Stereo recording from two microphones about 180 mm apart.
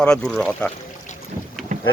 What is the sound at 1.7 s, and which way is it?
Boat, 40° right (ahead or behind).